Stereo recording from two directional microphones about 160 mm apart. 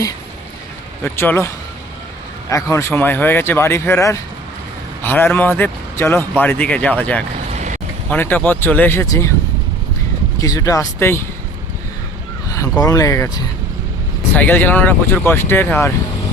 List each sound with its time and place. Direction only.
1.0 s speech: 15° left (ahead or behind)
2.5 s speech: 20° left (ahead or behind)
7.5 s a sound: 50° right (ahead or behind)
8.1 s speech: 10° left (ahead or behind)
10.4 s speech: 20° left (ahead or behind)
12.8 s speech: 20° left (ahead or behind)